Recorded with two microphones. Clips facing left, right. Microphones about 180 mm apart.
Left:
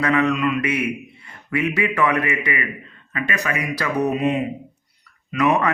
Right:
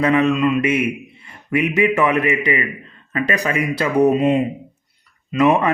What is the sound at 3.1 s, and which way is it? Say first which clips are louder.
A man's voice: right 5 dB; 35° right (ahead or behind).